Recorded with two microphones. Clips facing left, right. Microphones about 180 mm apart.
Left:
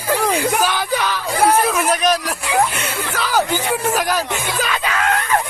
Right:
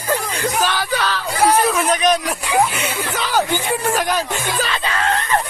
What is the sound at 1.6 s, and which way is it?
Speech, 5° left (ahead or behind).